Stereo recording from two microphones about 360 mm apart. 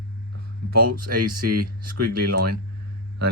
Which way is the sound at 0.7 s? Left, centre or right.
Right.